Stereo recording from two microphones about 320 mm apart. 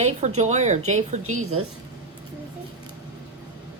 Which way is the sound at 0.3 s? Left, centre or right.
Right.